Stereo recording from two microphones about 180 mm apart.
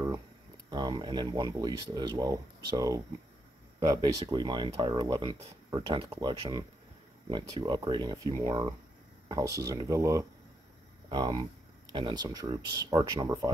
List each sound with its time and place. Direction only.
0.7 s speech: 25° right (ahead or behind)